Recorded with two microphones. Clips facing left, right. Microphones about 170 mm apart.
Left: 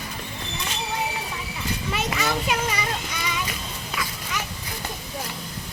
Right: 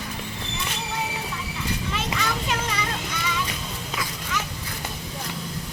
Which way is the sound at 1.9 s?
10° left (ahead or behind).